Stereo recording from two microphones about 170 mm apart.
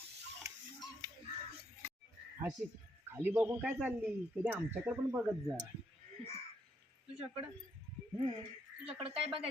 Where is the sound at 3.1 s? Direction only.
10° right (ahead or behind).